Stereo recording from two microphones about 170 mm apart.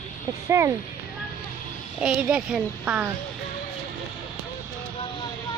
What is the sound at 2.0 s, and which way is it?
Speech, 5° right (ahead or behind).